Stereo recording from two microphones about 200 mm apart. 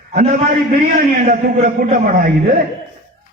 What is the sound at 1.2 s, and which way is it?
A man's voice, 40° right (ahead or behind).